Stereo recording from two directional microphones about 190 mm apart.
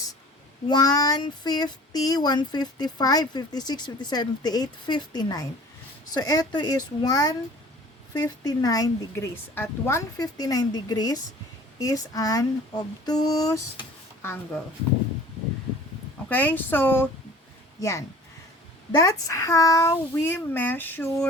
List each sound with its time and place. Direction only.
0.7 s speech: 20° left (ahead or behind)
16.3 s a child's voice: 10° left (ahead or behind)